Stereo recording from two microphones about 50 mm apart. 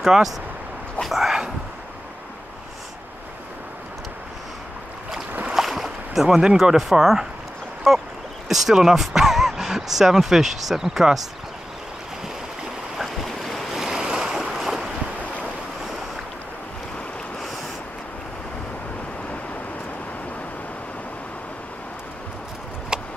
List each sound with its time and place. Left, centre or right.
0.0 s speech: centre
1.0 s a sound: centre
5.5 s boat: centre
6.8 s speech: centre
12.9 s waves: centre
13.8 s waves: centre
22.9 s horse: centre